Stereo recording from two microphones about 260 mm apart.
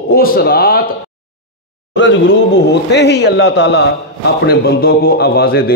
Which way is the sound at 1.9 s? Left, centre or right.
Left.